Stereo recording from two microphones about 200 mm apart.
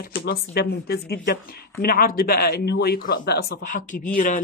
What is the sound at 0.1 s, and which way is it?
Speech, 50° left (ahead or behind).